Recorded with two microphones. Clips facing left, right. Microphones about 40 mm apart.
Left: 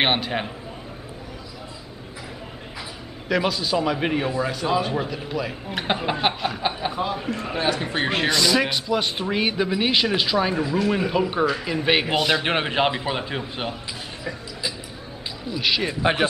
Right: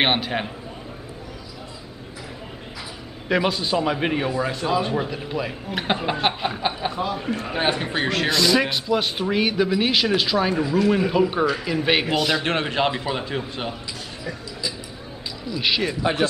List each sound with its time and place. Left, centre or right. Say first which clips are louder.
0.0 s speech: right 1 dB; centre
3.3 s a man's voice: right 1 dB; centre
5.7 s a man's voice: right 1 dB; centre
7.5 s a man's voice: right 1 dB; right
8.0 s speech: left 1 dB; left
8.3 s a man's voice: right 2 dB; centre
16.0 s speech: left 3 dB; left